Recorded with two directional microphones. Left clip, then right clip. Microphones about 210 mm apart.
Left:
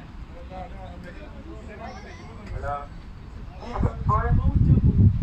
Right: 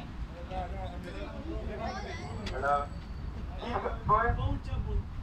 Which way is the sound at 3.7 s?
20° right (ahead or behind).